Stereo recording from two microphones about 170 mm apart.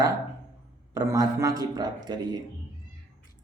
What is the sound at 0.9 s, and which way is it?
Speech, 20° right (ahead or behind).